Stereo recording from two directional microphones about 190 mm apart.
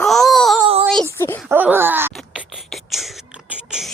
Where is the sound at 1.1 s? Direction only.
15° left (ahead or behind).